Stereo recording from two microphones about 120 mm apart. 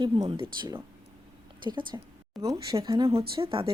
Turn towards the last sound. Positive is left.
turn(degrees=-50)  # may be behind; listen again after turning